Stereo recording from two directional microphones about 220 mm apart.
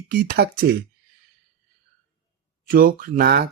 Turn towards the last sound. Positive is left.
turn(degrees=-45)  # may be behind; listen again after turning